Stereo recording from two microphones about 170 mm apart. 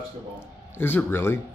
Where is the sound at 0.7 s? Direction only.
10° left (ahead or behind).